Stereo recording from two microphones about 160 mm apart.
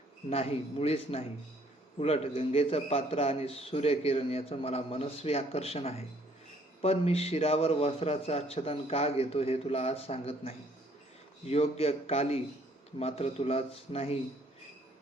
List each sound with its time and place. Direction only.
0.3 s a man's voice: 40° left (ahead or behind)